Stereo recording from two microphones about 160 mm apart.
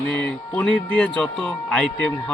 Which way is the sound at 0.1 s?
10° left (ahead or behind).